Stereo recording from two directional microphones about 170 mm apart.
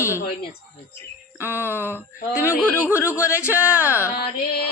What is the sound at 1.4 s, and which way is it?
Speech, 10° right (ahead or behind).